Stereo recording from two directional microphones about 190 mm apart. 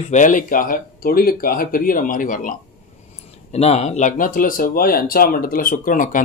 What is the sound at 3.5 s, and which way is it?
Speech, 35° left (ahead or behind).